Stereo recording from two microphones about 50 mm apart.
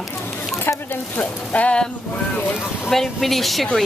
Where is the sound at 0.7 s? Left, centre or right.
Left.